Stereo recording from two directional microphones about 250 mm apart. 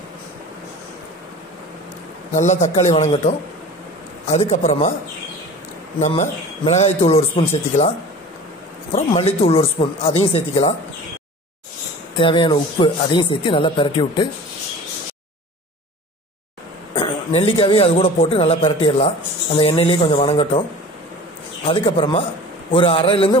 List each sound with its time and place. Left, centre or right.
2.3 s a man's voice: left
5.9 s a man's voice: left
8.9 s a man's voice: left
12.2 s a man's voice: centre
16.9 s a man's voice: left
21.6 s a man's voice: left